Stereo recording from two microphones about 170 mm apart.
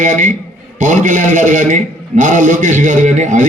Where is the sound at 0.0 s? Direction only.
50° right (ahead or behind).